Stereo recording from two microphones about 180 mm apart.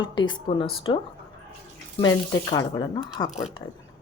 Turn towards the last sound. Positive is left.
turn(degrees=-5)  # may be behind; listen again after turning